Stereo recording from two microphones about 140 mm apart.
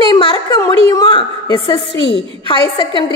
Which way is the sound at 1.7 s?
40° left (ahead or behind).